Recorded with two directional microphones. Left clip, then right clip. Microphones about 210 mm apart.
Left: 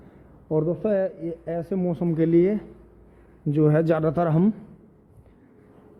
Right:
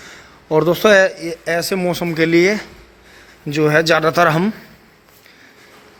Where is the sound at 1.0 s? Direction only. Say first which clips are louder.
Right 10 dB; 5° right (ahead or behind).